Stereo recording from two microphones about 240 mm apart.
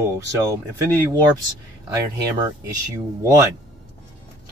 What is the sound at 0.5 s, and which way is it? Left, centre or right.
Speech, centre.